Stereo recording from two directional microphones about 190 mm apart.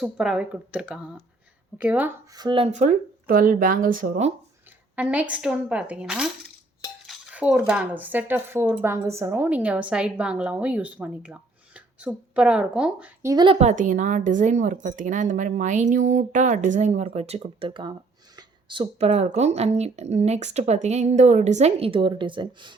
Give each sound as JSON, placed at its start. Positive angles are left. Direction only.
{"t": 0.0, "sound": "speech", "side_deg": -5}
{"t": 2.3, "sound": "speech", "side_deg": -25}
{"t": 2.6, "sound": "speech", "side_deg": -40}
{"t": 4.9, "sound": "speech", "side_deg": -5}
{"t": 13.3, "sound": "a woman's voice", "side_deg": -25}